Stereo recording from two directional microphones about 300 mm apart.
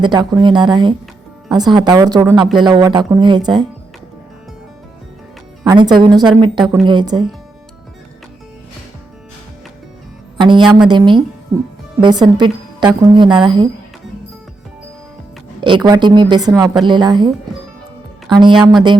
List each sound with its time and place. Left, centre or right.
0.0 s speech: centre
5.6 s speech: centre
10.4 s speech: centre
15.6 s speech: centre